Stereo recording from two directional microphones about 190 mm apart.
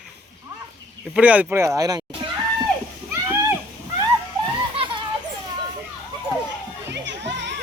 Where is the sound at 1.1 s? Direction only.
5° right (ahead or behind).